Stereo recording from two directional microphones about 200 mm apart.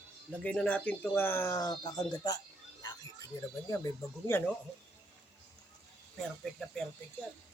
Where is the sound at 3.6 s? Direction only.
15° left (ahead or behind).